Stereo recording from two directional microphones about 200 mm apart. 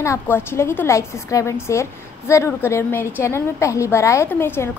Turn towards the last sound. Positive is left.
turn(degrees=10)  # may be behind; listen again after turning